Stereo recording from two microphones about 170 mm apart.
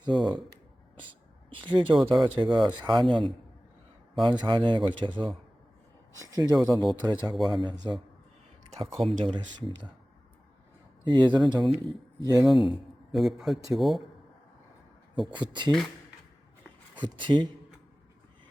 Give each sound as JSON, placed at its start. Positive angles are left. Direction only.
{"t": 0.0, "sound": "a man's voice", "side_deg": -25}
{"t": 1.5, "sound": "a man's voice", "side_deg": -30}
{"t": 6.3, "sound": "a man's voice", "side_deg": -20}
{"t": 11.0, "sound": "a man's voice", "side_deg": -25}
{"t": 12.7, "sound": "a man's voice", "side_deg": 0}
{"t": 15.3, "sound": "a man's voice", "side_deg": -25}
{"t": 17.0, "sound": "a man's voice", "side_deg": -25}